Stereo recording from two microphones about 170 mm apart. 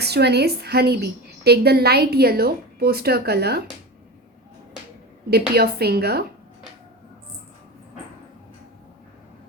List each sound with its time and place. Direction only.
0.0 s a woman's voice: 75° right (ahead or behind)
5.5 s a woman's voice: 65° right (ahead or behind)